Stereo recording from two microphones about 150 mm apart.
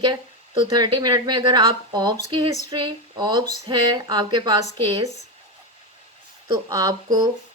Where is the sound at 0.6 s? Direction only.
25° right (ahead or behind).